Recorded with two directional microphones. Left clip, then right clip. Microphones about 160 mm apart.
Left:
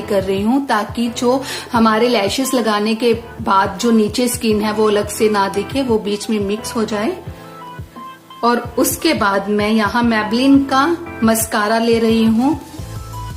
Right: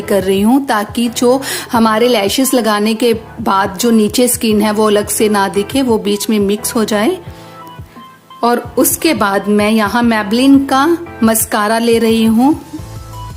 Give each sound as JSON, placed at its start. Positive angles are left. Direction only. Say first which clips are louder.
{"t": 0.0, "sound": "a woman's voice", "louder": "right 4 dB", "side_deg": -80}
{"t": 8.4, "sound": "a woman's voice", "louder": "right 3 dB", "side_deg": -90}